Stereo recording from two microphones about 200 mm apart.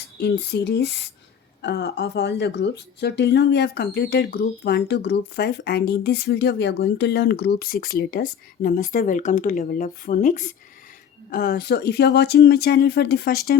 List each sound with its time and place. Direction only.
0.0 s speech: 55° left (ahead or behind)